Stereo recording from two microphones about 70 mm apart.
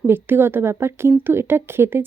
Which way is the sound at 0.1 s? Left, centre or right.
Right.